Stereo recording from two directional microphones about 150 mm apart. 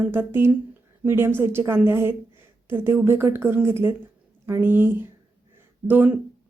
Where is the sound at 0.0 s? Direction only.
15° right (ahead or behind).